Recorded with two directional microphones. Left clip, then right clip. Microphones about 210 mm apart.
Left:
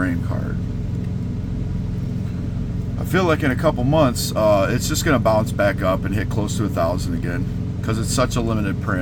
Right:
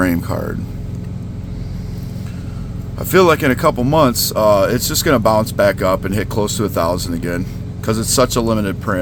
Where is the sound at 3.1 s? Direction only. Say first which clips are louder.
Right 7 dB; 50° right (ahead or behind).